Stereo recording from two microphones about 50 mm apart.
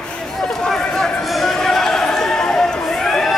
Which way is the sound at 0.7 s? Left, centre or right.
Centre.